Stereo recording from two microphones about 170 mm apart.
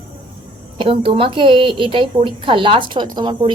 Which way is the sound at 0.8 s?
30° right (ahead or behind).